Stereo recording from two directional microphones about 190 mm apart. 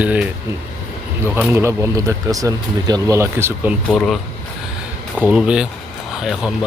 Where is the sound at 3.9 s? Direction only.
Centre (ahead or behind).